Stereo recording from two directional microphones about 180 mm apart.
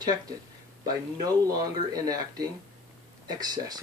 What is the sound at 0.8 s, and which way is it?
Speech, 20° right (ahead or behind).